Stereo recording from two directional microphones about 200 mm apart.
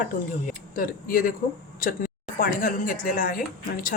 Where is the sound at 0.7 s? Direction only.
45° left (ahead or behind).